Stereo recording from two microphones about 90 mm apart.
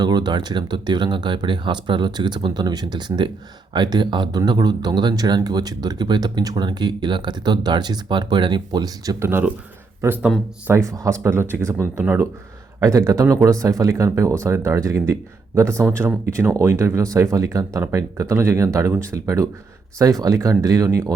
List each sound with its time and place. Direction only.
0.0 s speech: 50° right (ahead or behind)
9.1 s speech: 30° right (ahead or behind)